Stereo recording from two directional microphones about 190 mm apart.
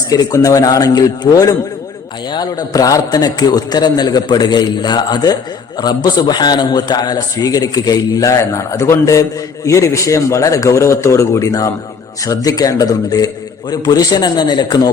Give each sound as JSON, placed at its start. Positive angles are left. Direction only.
{"t": 0.1, "sound": "a man's voice", "side_deg": 20}